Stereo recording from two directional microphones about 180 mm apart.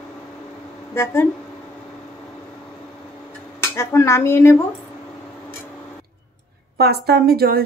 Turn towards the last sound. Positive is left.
turn(degrees=-60)  # may be behind; listen again after turning